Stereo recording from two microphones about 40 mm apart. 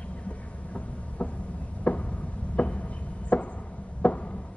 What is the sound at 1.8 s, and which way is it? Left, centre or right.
Chopping, left.